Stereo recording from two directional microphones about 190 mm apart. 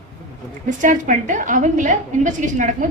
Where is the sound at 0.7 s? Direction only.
40° right (ahead or behind).